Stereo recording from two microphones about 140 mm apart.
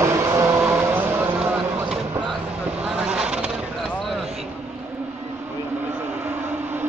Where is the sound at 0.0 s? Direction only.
20° right (ahead or behind).